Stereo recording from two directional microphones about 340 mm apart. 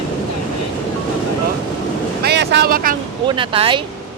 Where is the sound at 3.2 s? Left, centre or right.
Centre.